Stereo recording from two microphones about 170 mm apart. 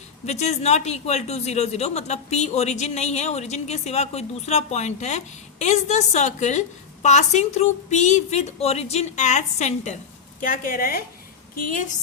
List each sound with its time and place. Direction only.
0.3 s speech: 40° left (ahead or behind)
10.4 s a woman's voice: 50° left (ahead or behind)